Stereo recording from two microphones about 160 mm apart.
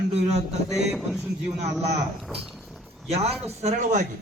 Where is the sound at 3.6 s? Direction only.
45° right (ahead or behind).